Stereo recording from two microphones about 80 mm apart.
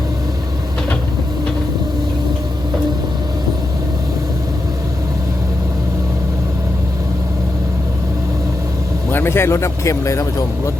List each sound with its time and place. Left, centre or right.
9.1 s speech: left